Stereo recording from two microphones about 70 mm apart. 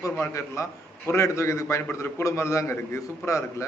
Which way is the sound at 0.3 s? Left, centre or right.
Left.